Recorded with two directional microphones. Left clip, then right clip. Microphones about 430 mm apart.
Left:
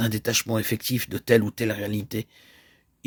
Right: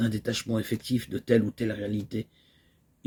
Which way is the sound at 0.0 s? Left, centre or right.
Left.